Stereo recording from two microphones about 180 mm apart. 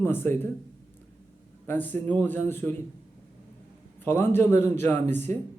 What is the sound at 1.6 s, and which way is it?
Speech, 10° left (ahead or behind).